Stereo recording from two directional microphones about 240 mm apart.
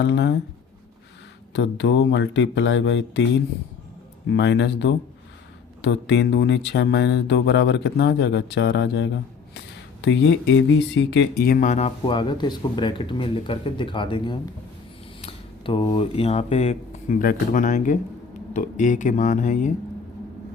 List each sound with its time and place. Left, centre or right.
0.0 s speech: left
1.5 s speech: left
4.3 s speech: left